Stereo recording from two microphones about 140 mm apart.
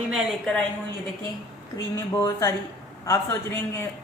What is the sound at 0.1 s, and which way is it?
Speech, 5° left (ahead or behind).